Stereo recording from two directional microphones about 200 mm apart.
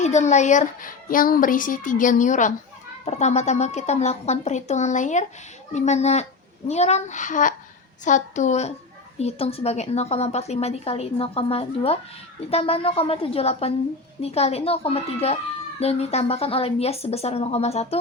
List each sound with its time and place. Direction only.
0.0 s a woman's voice: 35° left (ahead or behind)